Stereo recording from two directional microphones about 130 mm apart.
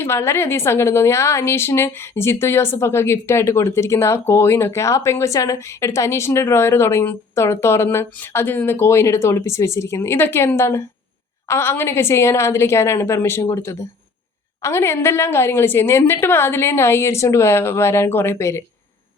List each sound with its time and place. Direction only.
0.0 s a woman's voice: 20° left (ahead or behind)